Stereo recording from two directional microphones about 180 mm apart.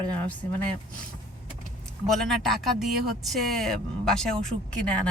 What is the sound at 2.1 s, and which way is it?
Speech, centre (ahead or behind).